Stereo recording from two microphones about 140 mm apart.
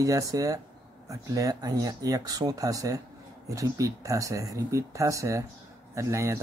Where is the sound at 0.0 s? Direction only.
25° right (ahead or behind).